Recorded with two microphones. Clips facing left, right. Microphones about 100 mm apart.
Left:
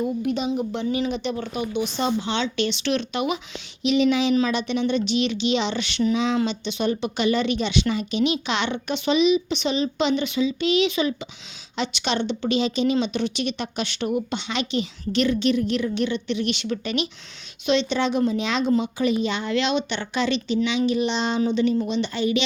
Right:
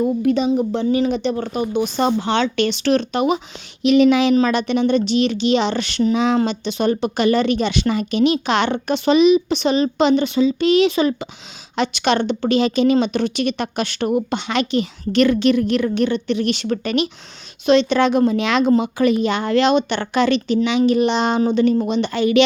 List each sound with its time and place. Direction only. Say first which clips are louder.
0.0 s speech: right 7 dB; 40° right (ahead or behind)
3.8 s speech: right 6 dB; 50° right (ahead or behind)